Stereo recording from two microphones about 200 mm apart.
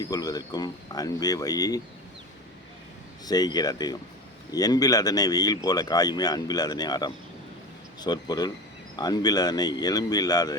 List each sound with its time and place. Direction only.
0.0 s speech: 20° left (ahead or behind)
3.2 s speech: 20° left (ahead or behind)